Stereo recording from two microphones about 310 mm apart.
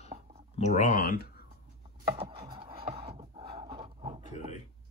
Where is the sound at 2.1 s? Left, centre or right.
Centre.